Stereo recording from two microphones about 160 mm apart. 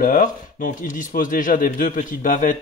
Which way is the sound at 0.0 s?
60° left (ahead or behind).